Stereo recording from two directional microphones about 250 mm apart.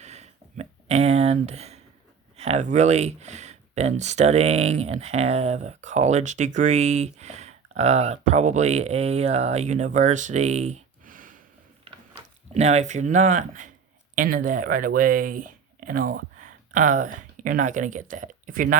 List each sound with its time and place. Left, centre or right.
0.0 s a sound: right
2.3 s speech: right
12.5 s speech: right